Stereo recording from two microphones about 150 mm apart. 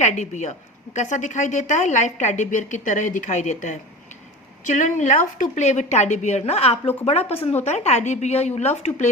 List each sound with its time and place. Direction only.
0.0 s a woman's voice: 50° left (ahead or behind)